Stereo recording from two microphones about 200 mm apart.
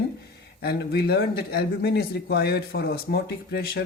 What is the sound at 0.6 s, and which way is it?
Speech, 55° left (ahead or behind).